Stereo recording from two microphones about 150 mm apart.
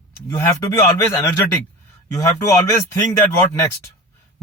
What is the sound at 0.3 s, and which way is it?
Speech, 20° left (ahead or behind).